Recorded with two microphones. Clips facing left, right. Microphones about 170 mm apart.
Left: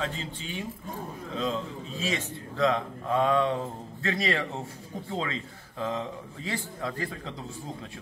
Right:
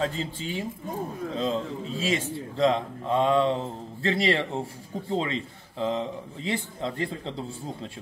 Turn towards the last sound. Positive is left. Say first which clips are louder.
# right 4 dB
turn(degrees=-25)  # may be behind; listen again after turning